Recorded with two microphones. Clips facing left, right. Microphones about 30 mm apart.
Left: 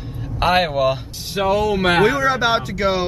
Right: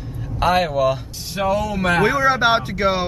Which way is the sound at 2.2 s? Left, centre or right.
Centre.